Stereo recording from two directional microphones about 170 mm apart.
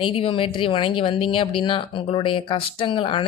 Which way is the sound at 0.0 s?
30° left (ahead or behind).